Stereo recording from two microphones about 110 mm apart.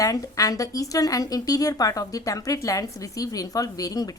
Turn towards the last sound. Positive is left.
turn(degrees=35)  # may be behind; listen again after turning